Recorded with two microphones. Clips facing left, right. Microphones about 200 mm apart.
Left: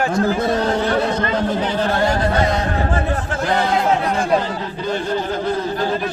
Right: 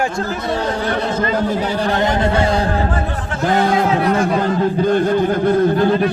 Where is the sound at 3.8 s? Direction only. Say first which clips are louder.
Right 3 dB; 50° right (ahead or behind).